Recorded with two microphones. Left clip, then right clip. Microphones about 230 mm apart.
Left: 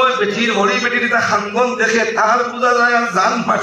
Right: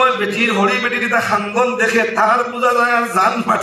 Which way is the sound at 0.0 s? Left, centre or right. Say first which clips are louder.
Even; right.